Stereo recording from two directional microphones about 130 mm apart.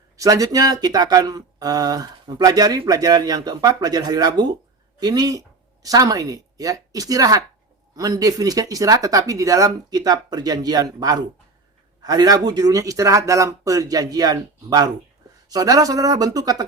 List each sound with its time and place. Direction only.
0.2 s speech: 25° right (ahead or behind)